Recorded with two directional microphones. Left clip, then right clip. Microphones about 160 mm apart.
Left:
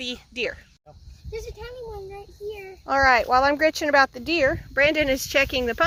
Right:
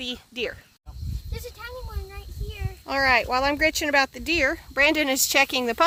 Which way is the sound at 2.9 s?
Centre (ahead or behind).